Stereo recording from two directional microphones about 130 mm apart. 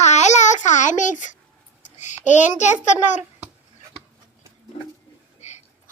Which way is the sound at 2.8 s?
65° left (ahead or behind).